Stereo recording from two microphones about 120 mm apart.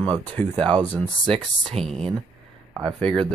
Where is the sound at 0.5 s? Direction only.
40° right (ahead or behind).